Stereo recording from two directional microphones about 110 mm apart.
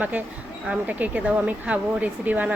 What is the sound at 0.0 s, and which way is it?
A woman's voice, 15° right (ahead or behind).